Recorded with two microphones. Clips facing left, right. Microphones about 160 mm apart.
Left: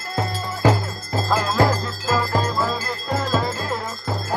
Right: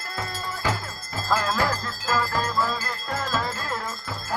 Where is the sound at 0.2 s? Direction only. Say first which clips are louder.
Left 9 dB; 40° left (ahead or behind).